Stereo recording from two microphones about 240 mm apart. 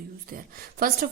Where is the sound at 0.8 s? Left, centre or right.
Right.